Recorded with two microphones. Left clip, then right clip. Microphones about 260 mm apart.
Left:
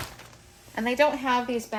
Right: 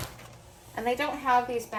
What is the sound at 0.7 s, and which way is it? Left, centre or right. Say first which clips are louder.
Speech: left 6 dB; centre.